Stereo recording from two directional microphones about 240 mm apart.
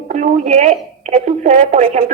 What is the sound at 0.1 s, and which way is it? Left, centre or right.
Speech, right.